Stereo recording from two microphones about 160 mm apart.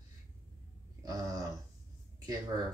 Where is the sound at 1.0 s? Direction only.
20° right (ahead or behind).